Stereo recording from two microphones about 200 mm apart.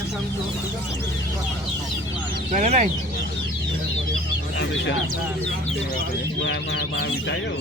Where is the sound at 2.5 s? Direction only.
35° right (ahead or behind).